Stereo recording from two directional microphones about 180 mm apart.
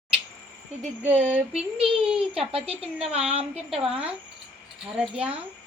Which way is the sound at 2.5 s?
30° right (ahead or behind).